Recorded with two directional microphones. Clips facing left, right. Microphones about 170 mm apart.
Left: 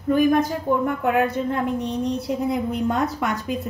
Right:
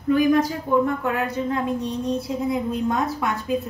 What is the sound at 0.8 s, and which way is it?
A woman's voice, 60° left (ahead or behind).